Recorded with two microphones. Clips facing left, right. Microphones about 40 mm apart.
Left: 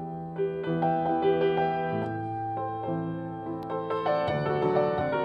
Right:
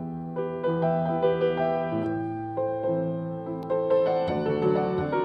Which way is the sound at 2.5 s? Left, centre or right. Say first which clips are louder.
Right 8 dB; centre.